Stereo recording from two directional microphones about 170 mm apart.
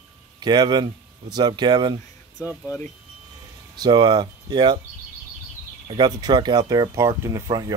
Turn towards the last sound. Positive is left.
turn(degrees=-20)  # may be behind; listen again after turning